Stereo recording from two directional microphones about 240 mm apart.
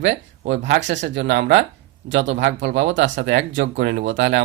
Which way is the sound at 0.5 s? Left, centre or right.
Right.